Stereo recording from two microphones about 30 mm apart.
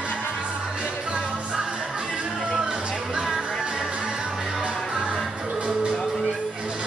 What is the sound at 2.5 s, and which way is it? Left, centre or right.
Music, right.